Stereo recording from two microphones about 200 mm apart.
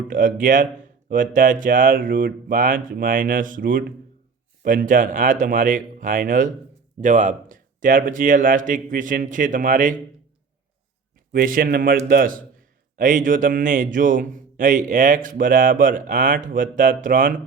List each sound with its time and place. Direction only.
0.1 s a man's voice: 40° right (ahead or behind)
11.3 s a man's voice: 45° right (ahead or behind)